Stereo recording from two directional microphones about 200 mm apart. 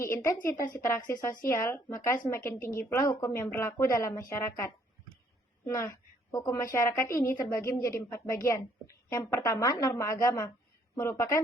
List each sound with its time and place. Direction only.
0.0 s a woman's voice: 15° left (ahead or behind)